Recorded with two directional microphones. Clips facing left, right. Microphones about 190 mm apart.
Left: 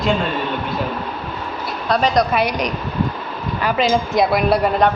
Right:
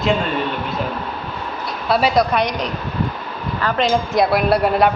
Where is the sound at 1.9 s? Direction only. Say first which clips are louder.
Right 1 dB; 5° right (ahead or behind).